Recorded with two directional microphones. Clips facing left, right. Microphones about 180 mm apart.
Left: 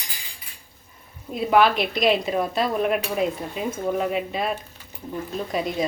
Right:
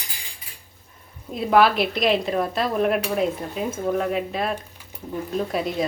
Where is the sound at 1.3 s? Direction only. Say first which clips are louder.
Right 1 dB; centre (ahead or behind).